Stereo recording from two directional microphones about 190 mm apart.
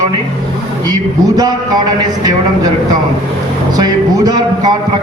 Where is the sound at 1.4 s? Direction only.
20° right (ahead or behind).